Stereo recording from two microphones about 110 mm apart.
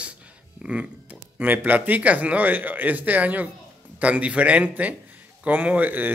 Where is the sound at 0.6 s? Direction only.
5° right (ahead or behind).